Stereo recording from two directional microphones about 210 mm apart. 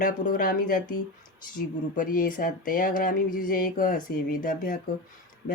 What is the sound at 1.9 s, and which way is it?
Speech, 40° left (ahead or behind).